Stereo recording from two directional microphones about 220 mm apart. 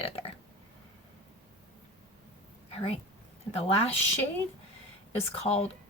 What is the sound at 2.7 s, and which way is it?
Speech, 25° left (ahead or behind).